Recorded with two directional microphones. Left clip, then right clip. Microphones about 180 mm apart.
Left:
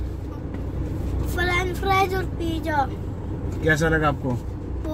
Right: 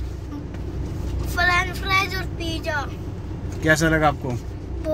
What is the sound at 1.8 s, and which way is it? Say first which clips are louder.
Speech: left 1 dB; 25° left (ahead or behind).